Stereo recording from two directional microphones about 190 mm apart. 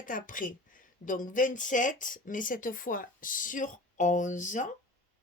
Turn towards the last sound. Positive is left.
turn(degrees=40)  # may be behind; listen again after turning